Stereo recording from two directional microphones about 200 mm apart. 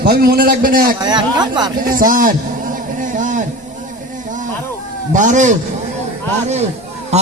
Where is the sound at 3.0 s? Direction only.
40° right (ahead or behind).